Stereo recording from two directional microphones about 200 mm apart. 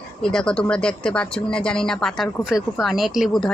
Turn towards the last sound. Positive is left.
turn(degrees=0)  # may be behind; listen again after turning